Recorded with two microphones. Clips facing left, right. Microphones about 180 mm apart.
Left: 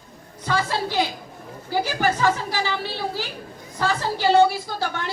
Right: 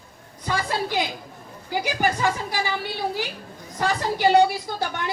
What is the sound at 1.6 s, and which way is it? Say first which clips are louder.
Speech: left 1 dB; 15° right (ahead or behind).